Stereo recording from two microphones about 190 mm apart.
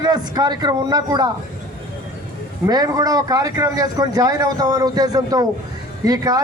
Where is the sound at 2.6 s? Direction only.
20° right (ahead or behind).